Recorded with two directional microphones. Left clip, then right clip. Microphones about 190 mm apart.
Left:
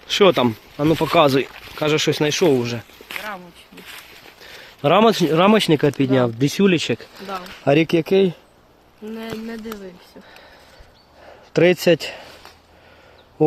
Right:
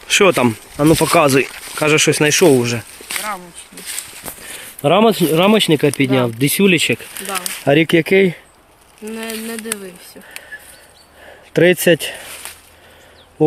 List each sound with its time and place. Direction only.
0.1 s speech: centre (ahead or behind)
0.8 s speech: 15° right (ahead or behind)
1.2 s speech: 5° right (ahead or behind)
4.8 s speech: centre (ahead or behind)
9.0 s speech: 25° left (ahead or behind)
11.5 s speech: centre (ahead or behind)